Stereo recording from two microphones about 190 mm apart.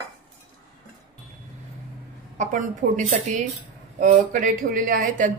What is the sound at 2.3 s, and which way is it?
A woman's voice, 40° right (ahead or behind).